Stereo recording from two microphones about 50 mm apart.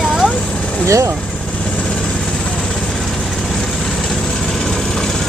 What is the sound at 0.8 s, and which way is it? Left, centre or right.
Speech, right.